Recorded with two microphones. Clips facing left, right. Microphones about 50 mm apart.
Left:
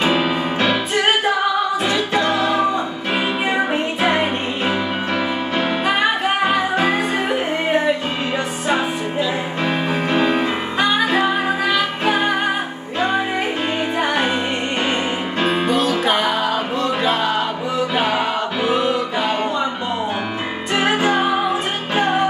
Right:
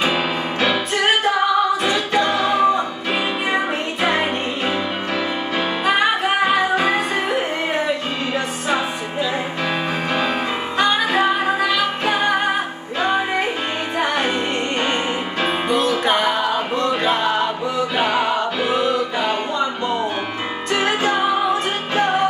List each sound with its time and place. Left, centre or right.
0.0 s music: centre
2.4 s music: centre
4.1 s music: centre
10.3 s music: centre
13.9 s music: centre
15.4 s music: right
16.0 s music: centre
18.1 s music: centre
20.7 s music: centre